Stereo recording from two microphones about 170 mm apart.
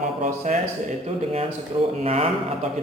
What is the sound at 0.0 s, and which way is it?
Speech, 50° right (ahead or behind).